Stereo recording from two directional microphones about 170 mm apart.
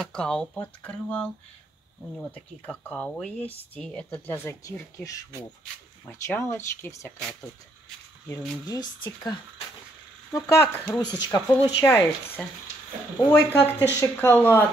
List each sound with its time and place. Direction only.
0.0 s speech: 5° left (ahead or behind)
8.6 s speech: 25° left (ahead or behind)
11.8 s speech: 10° left (ahead or behind)